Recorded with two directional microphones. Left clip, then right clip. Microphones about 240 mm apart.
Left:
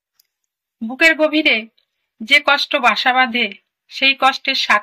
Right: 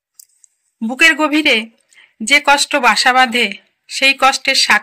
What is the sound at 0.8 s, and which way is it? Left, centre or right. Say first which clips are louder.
Speech: right 2 dB; right.